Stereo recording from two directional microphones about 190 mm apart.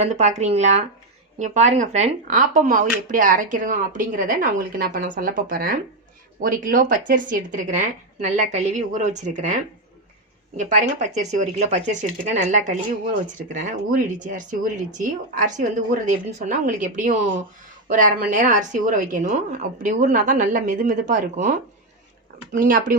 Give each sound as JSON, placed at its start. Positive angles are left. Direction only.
{"t": 0.0, "sound": "a woman's voice", "side_deg": -35}
{"t": 10.6, "sound": "a woman's voice", "side_deg": -40}
{"t": 13.9, "sound": "a woman's voice", "side_deg": -45}
{"t": 22.5, "sound": "speech", "side_deg": -45}